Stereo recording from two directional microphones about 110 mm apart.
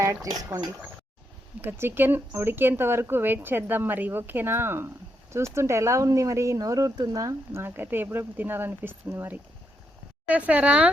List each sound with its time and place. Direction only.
0.0 s speech: 30° right (ahead or behind)
1.6 s a woman's voice: 20° right (ahead or behind)